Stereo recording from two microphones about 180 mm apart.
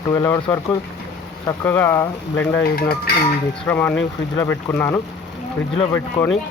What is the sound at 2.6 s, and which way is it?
Music, 60° left (ahead or behind).